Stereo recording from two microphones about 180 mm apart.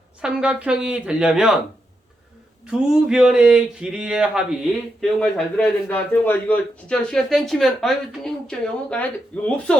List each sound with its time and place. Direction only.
0.2 s speech: 5° right (ahead or behind)
2.6 s speech: 5° right (ahead or behind)